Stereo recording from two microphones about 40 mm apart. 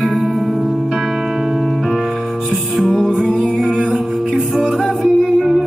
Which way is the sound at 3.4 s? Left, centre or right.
Right.